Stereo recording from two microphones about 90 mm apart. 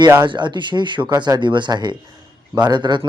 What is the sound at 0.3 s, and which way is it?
Speech, 60° right (ahead or behind).